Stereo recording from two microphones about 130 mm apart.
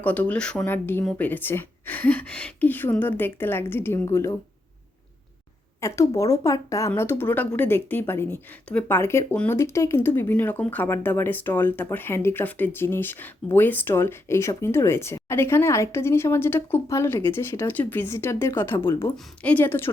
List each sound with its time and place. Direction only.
0.0 s speech: 10° left (ahead or behind)
5.8 s speech: 25° left (ahead or behind)
9.3 s speech: 10° left (ahead or behind)
9.6 s speech: 20° left (ahead or behind)